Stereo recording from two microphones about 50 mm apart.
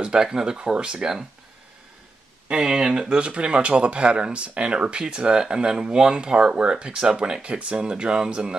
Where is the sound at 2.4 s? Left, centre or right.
Centre.